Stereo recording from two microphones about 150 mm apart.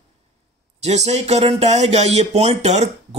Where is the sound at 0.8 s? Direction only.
45° right (ahead or behind).